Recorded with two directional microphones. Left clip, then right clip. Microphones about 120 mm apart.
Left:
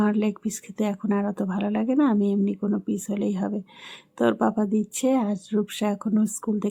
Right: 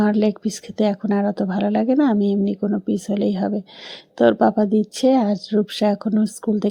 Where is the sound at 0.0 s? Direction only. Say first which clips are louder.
Right 6 dB; 25° right (ahead or behind).